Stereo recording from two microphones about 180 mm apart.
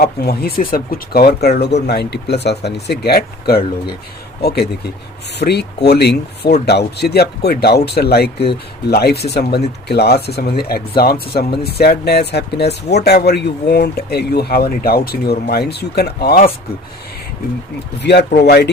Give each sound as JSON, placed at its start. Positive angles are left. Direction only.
{"t": 0.0, "sound": "speech", "side_deg": 60}
{"t": 18.0, "sound": "speech", "side_deg": 70}